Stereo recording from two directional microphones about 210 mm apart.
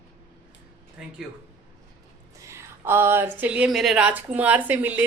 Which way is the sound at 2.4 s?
10° right (ahead or behind).